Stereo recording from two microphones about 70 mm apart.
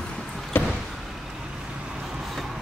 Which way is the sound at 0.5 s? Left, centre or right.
Left.